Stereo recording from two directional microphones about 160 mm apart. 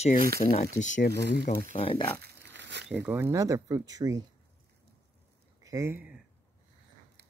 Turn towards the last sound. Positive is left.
turn(degrees=-10)  # may be behind; listen again after turning